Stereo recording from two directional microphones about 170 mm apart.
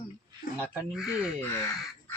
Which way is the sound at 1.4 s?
15° left (ahead or behind).